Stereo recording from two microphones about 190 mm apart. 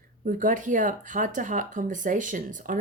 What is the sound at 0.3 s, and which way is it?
Speech, 45° right (ahead or behind).